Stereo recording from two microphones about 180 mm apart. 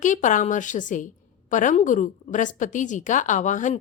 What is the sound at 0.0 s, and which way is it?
A woman's voice, 45° left (ahead or behind).